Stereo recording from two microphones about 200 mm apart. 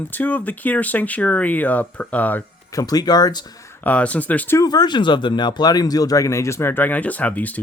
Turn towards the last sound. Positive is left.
turn(degrees=10)  # may be behind; listen again after turning